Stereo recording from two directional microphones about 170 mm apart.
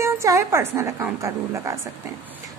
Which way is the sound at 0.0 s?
15° right (ahead or behind).